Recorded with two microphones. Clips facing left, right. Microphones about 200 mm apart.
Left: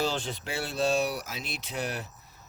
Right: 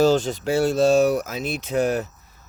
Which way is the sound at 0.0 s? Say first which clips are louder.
Right 12 dB; 45° right (ahead or behind).